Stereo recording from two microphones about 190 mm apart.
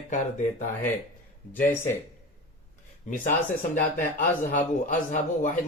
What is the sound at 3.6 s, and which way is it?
Speech, 45° left (ahead or behind).